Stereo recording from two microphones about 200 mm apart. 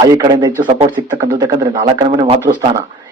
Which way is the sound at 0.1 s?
20° right (ahead or behind).